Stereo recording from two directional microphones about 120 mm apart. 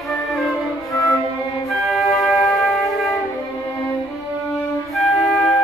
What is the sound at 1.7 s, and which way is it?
Music, centre (ahead or behind).